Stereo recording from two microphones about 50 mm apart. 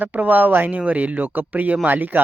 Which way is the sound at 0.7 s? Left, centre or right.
Right.